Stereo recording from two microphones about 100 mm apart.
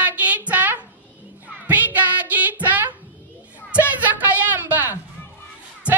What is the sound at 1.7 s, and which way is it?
Music, 15° right (ahead or behind).